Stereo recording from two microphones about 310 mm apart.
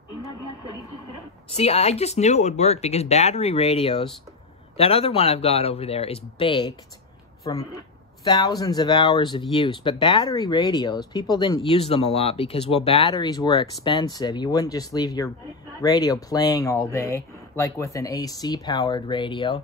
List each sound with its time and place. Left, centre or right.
1.5 s speech: centre